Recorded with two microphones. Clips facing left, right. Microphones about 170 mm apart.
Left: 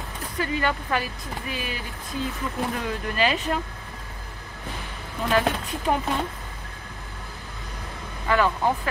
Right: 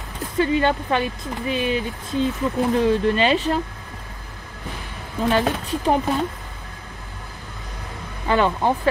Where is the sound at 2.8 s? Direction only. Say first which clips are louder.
Right 7 dB; 30° right (ahead or behind).